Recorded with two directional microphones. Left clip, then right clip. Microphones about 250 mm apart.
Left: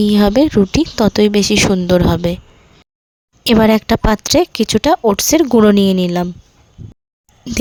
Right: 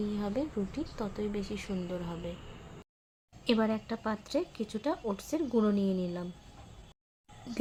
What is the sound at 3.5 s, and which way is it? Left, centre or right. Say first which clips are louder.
Speech: left 19 dB; left.